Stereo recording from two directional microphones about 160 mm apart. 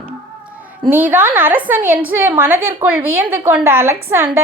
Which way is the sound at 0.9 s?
10° right (ahead or behind).